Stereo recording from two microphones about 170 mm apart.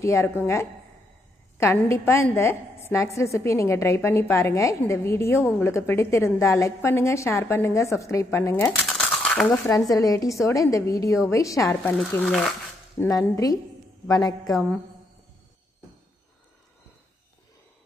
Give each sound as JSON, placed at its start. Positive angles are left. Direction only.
{"t": 0.0, "sound": "a woman's voice", "side_deg": 15}
{"t": 1.9, "sound": "a woman's voice", "side_deg": 15}
{"t": 9.8, "sound": "a woman's voice", "side_deg": 20}
{"t": 11.7, "sound": "speech", "side_deg": 0}
{"t": 12.9, "sound": "a woman's voice", "side_deg": 15}